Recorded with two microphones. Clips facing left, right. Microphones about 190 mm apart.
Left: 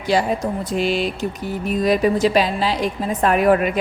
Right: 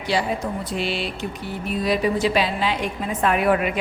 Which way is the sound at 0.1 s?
45° left (ahead or behind).